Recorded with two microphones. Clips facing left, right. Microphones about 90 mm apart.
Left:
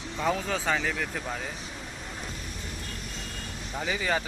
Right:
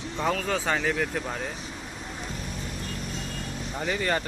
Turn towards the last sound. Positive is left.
turn(degrees=5)  # may be behind; listen again after turning